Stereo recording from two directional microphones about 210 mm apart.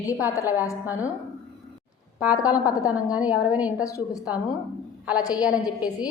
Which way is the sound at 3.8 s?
15° left (ahead or behind).